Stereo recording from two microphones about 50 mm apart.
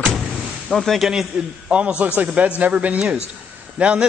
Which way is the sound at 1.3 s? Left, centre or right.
Right.